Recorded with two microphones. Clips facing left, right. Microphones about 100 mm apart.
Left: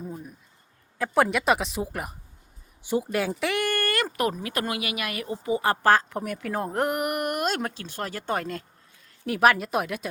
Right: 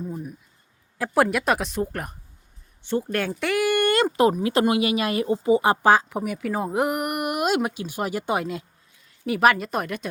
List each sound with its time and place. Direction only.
0.0 s a sound: centre (ahead or behind)
0.9 s speech: 5° right (ahead or behind)
3.7 s a woman's voice: 20° right (ahead or behind); by 10.1 s 5° left (ahead or behind)